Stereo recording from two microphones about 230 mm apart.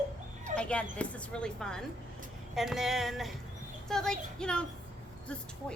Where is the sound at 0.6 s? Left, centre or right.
Centre.